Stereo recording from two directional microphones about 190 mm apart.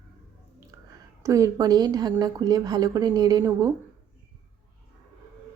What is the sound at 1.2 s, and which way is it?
A woman's voice, 15° right (ahead or behind).